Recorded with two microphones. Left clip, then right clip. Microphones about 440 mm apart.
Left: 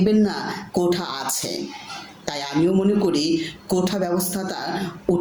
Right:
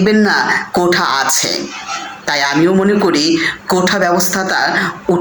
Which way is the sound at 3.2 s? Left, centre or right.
Left.